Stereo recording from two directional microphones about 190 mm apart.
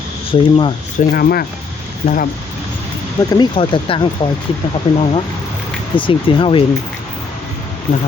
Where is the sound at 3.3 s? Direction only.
25° left (ahead or behind).